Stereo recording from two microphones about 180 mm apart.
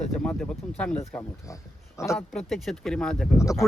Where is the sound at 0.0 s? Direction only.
5° left (ahead or behind).